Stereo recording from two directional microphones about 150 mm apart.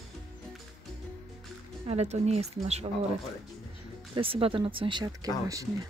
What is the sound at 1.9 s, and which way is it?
Speech, 45° right (ahead or behind).